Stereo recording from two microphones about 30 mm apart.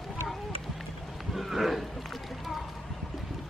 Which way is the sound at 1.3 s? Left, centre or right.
Centre.